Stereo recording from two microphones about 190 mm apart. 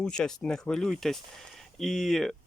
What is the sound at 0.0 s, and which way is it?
Speech, 5° left (ahead or behind).